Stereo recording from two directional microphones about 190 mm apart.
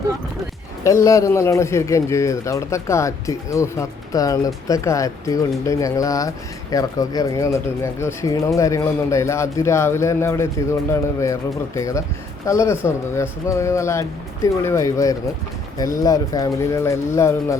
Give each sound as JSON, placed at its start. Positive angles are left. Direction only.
{"t": 0.9, "sound": "speech", "side_deg": 15}